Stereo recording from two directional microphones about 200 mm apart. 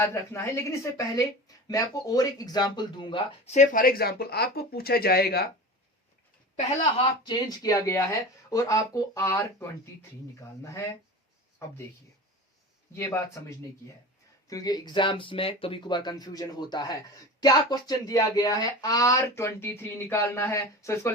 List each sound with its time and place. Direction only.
0.0 s speech: 10° left (ahead or behind)
3.5 s speech: 40° left (ahead or behind)
7.3 s speech: 20° left (ahead or behind)
13.4 s speech: 15° left (ahead or behind)